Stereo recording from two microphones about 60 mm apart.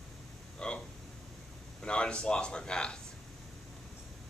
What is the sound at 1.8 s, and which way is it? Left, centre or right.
A man's voice, centre.